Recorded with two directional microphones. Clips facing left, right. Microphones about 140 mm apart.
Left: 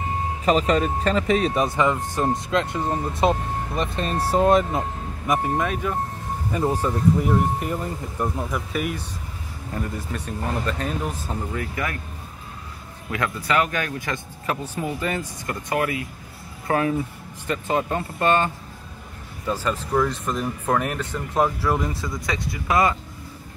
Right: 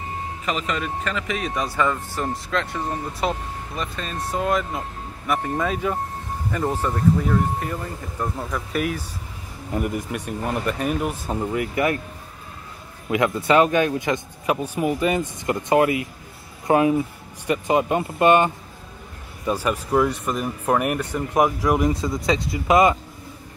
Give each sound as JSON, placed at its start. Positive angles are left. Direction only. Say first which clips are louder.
{"t": 0.5, "sound": "speech", "louder": "left 7 dB", "side_deg": 35}
{"t": 5.3, "sound": "speech", "louder": "left 1 dB", "side_deg": 10}
{"t": 9.7, "sound": "speech", "louder": "right 4 dB", "side_deg": -15}
{"t": 13.1, "sound": "speech", "louder": "right 5 dB", "side_deg": -20}